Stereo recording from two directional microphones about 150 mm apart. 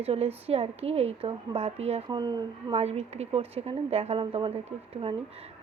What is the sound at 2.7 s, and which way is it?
Speech, 45° right (ahead or behind).